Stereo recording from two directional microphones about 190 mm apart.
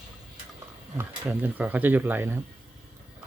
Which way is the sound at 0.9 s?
10° right (ahead or behind).